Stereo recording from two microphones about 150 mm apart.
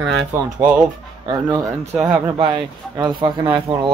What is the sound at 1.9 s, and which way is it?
Speech, 5° right (ahead or behind).